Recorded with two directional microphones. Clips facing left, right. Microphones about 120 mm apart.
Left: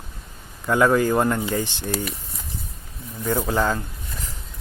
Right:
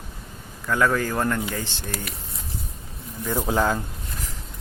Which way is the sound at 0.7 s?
20° left (ahead or behind).